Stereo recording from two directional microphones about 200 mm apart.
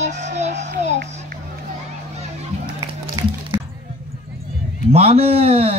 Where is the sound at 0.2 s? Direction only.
35° right (ahead or behind).